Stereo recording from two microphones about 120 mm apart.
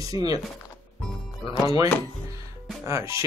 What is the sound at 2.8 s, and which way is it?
Speech, 25° right (ahead or behind).